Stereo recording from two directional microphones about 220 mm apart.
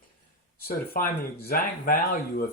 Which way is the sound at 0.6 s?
45° left (ahead or behind).